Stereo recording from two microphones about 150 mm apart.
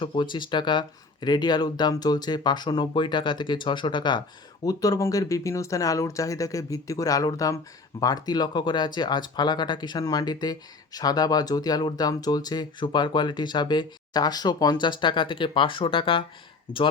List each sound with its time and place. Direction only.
0.0 s speech: 35° left (ahead or behind)